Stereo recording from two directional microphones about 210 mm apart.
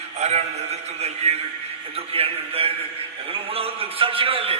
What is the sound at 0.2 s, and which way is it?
A man's voice, 30° right (ahead or behind).